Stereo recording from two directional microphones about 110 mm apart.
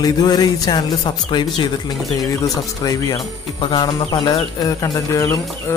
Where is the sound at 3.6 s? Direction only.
45° left (ahead or behind).